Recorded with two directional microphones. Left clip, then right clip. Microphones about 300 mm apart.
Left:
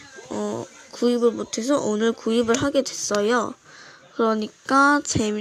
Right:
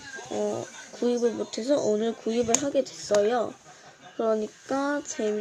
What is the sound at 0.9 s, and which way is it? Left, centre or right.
Speech, left.